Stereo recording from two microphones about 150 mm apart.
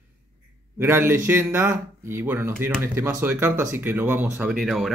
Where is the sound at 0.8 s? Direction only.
15° right (ahead or behind).